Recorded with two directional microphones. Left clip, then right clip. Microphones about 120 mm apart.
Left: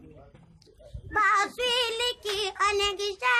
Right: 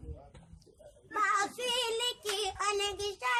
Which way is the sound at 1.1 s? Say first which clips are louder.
Left 7 dB; 20° left (ahead or behind).